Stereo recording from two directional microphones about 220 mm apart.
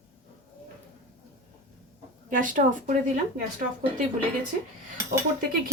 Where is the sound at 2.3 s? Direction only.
35° right (ahead or behind).